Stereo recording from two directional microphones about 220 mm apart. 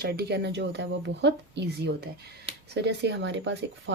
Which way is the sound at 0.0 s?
45° right (ahead or behind).